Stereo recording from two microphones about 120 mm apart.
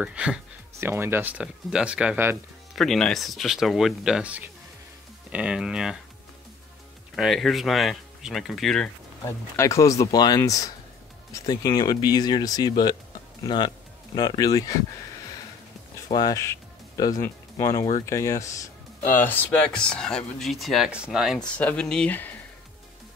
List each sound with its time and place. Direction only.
0.0 s speech: 10° right (ahead or behind)
0.7 s speech: 20° right (ahead or behind)
2.7 s speech: centre (ahead or behind)
7.2 s speech: centre (ahead or behind)
9.6 s speech: 25° left (ahead or behind)
14.1 s speech: 35° left (ahead or behind)
16.1 s speech: 35° left (ahead or behind); by 21.5 s 5° right (ahead or behind)
21.5 s speech: 10° left (ahead or behind)